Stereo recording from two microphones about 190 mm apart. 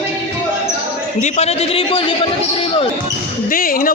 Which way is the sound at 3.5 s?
50° left (ahead or behind).